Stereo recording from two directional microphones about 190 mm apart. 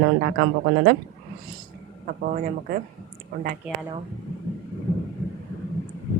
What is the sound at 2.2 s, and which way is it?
Speech, 45° right (ahead or behind).